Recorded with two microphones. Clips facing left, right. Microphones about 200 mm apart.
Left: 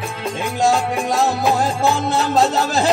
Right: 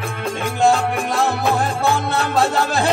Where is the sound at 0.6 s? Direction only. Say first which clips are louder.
Right 1 dB; 60° right (ahead or behind).